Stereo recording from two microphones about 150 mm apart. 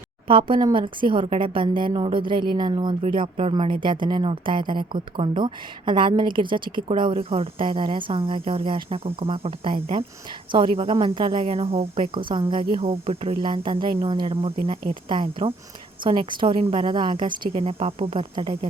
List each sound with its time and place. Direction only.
0.3 s speech: 35° right (ahead or behind)